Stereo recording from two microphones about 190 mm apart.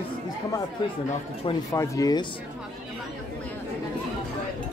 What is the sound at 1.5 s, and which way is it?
Speech, 15° left (ahead or behind).